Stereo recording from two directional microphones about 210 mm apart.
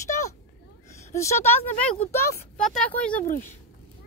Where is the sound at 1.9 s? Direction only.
15° left (ahead or behind).